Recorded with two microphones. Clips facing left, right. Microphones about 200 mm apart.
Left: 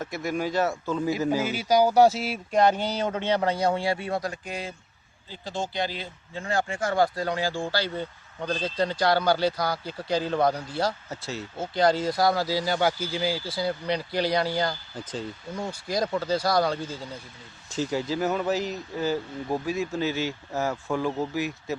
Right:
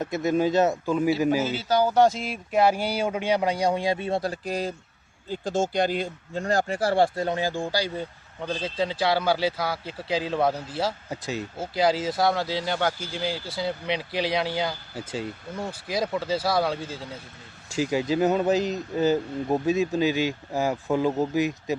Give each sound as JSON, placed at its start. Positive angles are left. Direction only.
{"t": 0.0, "sound": "speech", "side_deg": -20}
{"t": 1.5, "sound": "speech", "side_deg": 15}
{"t": 5.3, "sound": "speech", "side_deg": -50}
{"t": 8.6, "sound": "speech", "side_deg": 0}
{"t": 11.1, "sound": "speech", "side_deg": -15}